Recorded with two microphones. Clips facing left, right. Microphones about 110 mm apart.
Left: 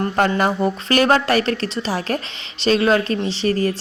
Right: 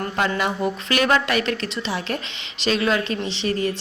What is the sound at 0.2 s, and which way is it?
A woman's voice, 40° left (ahead or behind).